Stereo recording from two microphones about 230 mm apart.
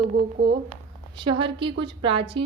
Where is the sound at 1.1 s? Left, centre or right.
Right.